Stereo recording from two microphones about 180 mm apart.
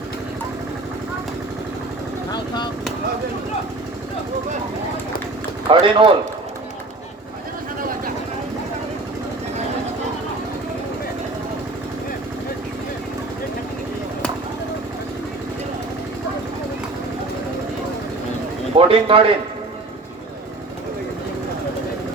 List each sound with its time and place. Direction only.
5.6 s speech: 30° right (ahead or behind)
7.8 s vehicle: 50° right (ahead or behind)
18.8 s a man's voice: 30° right (ahead or behind)